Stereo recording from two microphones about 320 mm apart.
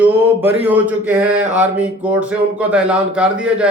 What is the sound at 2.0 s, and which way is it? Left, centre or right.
A man's voice, centre.